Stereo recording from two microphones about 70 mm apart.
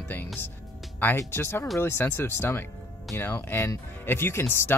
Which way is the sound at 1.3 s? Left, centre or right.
Left.